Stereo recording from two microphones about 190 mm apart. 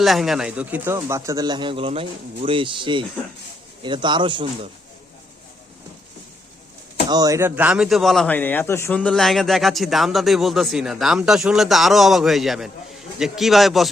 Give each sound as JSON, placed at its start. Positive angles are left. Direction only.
{"t": 0.0, "sound": "a man's voice", "side_deg": 0}
{"t": 7.1, "sound": "speech", "side_deg": -20}